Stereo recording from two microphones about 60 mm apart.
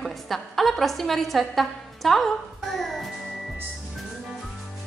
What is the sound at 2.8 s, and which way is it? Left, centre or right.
Music, centre.